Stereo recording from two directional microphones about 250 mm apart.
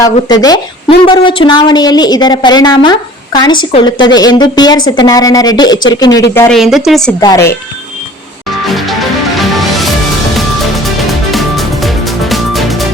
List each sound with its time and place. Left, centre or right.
0.0 s a woman's voice: centre
6.6 s a woman's voice: centre
7.2 s a woman's voice: centre
8.7 s music: centre